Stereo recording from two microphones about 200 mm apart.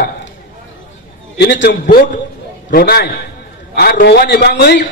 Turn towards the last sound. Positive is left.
turn(degrees=55)  # may be behind; listen again after turning